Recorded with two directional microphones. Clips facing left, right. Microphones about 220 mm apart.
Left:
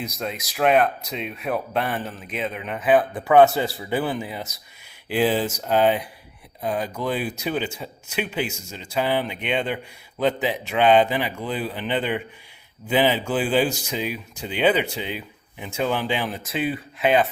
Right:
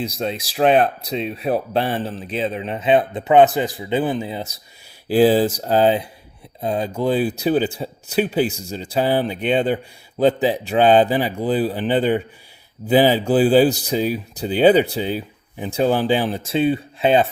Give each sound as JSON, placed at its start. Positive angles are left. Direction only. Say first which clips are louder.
{"t": 0.0, "sound": "speech", "louder": "right 5 dB", "side_deg": -30}